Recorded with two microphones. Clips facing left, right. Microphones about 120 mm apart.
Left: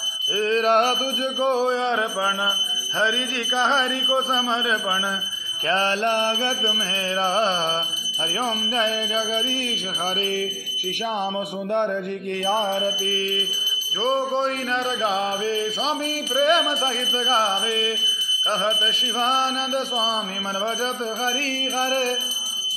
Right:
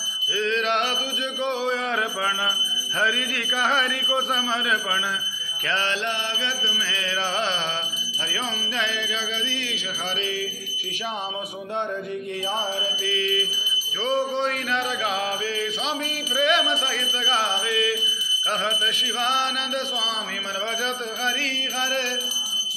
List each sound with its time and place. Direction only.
0.4 s alarm: 40° left (ahead or behind)
3.5 s speech: 25° left (ahead or behind)
5.7 s mantra: 40° left (ahead or behind)
7.2 s alarm: 35° left (ahead or behind)
12.4 s music: 60° left (ahead or behind)
13.0 s alarm: 35° left (ahead or behind)
19.2 s alarm: 40° left (ahead or behind)
21.7 s alarm: 40° left (ahead or behind)